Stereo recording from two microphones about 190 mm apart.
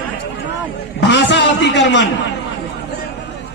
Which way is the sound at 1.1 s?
70° left (ahead or behind).